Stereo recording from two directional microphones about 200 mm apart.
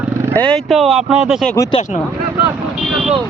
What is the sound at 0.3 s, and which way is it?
Speech, 5° left (ahead or behind).